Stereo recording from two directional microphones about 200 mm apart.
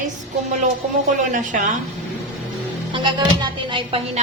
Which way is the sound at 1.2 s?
40° right (ahead or behind).